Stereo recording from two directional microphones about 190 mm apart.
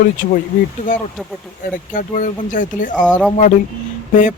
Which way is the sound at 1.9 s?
45° left (ahead or behind).